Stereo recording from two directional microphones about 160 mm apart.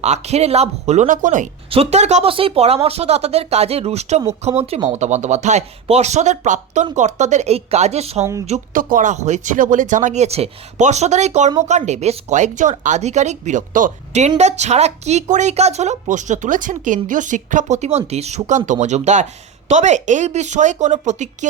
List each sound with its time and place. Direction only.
0.0 s speech: 45° right (ahead or behind)
1.7 s speech: 40° right (ahead or behind)
8.2 s speech: 20° right (ahead or behind)
8.4 s speech: 50° right (ahead or behind)